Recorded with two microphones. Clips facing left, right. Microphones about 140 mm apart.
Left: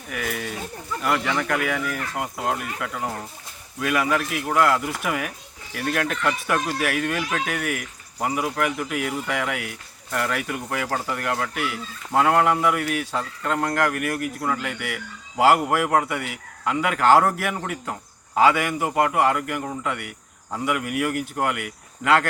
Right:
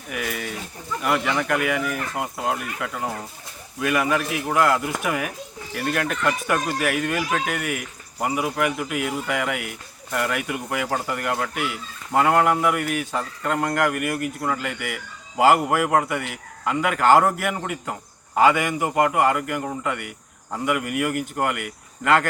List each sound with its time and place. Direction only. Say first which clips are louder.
0.1 s speech: even; centre (ahead or behind)